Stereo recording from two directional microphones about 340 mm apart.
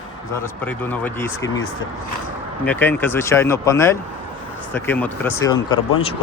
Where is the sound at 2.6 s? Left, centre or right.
Centre.